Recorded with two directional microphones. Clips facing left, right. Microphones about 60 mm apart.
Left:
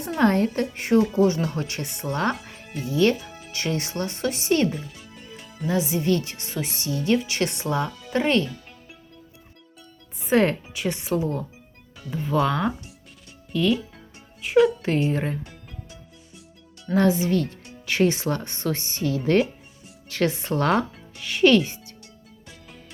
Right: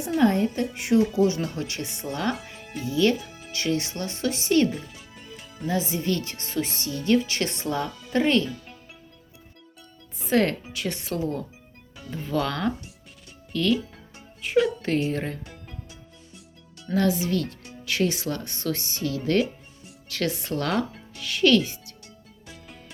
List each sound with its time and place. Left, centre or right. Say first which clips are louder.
0.2 s a woman's voice: left 2 dB; left
0.7 s speech: even; left
3.2 s music: even; centre
3.5 s speech: right 1 dB; left
4.7 s music: left 1 dB; centre
5.6 s speech: left 3 dB; left
10.2 s speech: left 2 dB; left
16.9 s speech: left 3 dB; left